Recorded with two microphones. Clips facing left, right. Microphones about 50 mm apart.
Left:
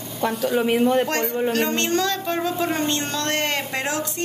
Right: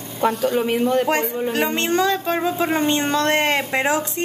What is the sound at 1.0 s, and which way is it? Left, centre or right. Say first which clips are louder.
A woman's voice: right 2 dB; centre.